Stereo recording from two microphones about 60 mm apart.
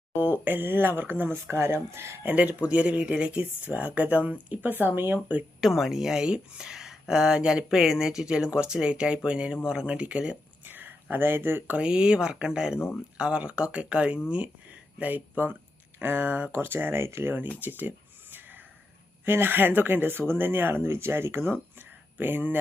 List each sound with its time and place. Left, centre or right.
0.1 s speech: right
2.2 s speech: right
4.7 s speech: right
5.5 s speech: centre
10.7 s speech: right
11.8 s speech: centre; by 16.5 s right
16.5 s speech: right
17.6 s a sound: right
19.2 s speech: right